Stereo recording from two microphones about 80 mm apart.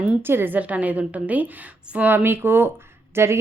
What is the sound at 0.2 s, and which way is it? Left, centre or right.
A woman's voice, right.